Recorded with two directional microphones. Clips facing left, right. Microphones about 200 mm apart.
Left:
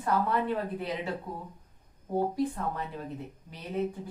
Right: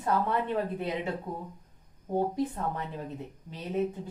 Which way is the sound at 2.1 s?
20° right (ahead or behind).